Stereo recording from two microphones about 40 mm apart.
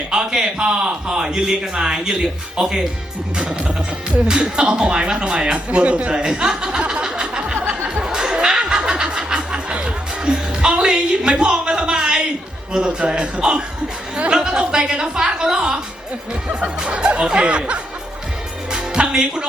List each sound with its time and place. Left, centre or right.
0.1 s a man's voice: right
5.5 s speech: right
6.1 s a sound: centre
7.9 s music: right
8.9 s snicker: centre
9.8 s music: centre
12.7 s a man's voice: right
18.7 s music: right